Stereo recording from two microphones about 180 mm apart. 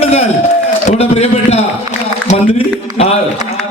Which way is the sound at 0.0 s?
40° left (ahead or behind).